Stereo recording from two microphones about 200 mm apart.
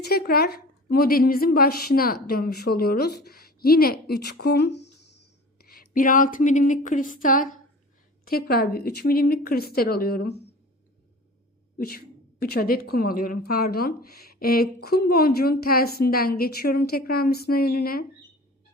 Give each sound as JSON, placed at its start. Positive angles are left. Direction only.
{"t": 0.0, "sound": "a woman's voice", "side_deg": 50}
{"t": 11.8, "sound": "a woman's voice", "side_deg": 50}